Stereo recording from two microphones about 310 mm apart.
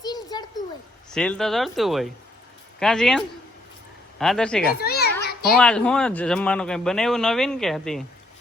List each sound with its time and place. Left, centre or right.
0.0 s a sound: centre
1.1 s speech: centre
4.8 s children playing: left
5.5 s speech: centre